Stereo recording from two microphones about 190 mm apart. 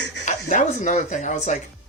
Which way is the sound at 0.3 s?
40° left (ahead or behind).